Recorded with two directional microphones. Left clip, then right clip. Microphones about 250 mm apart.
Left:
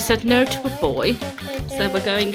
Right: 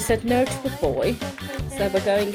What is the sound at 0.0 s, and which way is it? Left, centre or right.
Speech, centre.